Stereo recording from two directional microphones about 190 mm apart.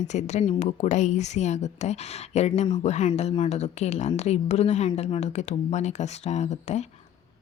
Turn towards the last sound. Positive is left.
turn(degrees=35)  # may be behind; listen again after turning